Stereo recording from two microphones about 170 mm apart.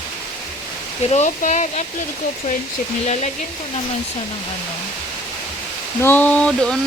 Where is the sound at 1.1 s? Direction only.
45° left (ahead or behind).